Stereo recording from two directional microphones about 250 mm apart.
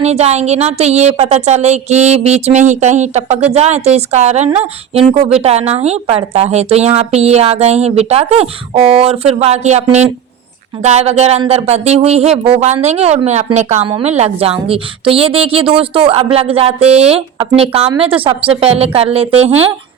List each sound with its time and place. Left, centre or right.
0.0 s a woman's voice: right